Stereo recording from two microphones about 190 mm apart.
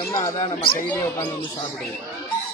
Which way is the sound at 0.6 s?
50° left (ahead or behind).